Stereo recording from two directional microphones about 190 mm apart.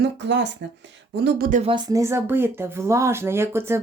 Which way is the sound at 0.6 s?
65° right (ahead or behind).